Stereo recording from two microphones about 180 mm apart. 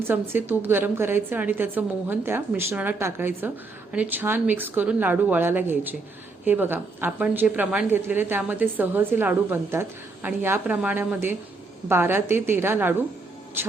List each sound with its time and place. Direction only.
0.0 s a woman's voice: 10° right (ahead or behind)